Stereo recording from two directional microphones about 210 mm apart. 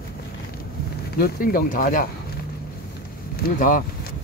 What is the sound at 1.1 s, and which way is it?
Speech, 45° left (ahead or behind).